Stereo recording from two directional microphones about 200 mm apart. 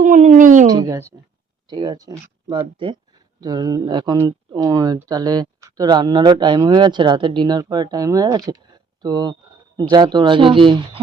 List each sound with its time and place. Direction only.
0.0 s speech: 40° right (ahead or behind)
0.7 s a woman's voice: 15° right (ahead or behind)